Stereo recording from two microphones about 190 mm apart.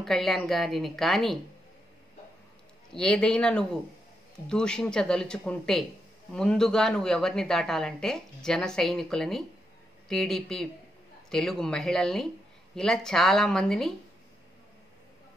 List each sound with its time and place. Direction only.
0.0 s a woman's voice: centre (ahead or behind)
2.9 s a woman's voice: 5° left (ahead or behind)